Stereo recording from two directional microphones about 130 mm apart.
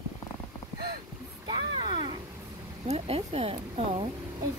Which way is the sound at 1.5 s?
35° right (ahead or behind).